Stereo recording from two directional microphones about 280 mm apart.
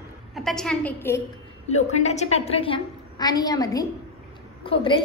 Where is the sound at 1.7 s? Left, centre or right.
Left.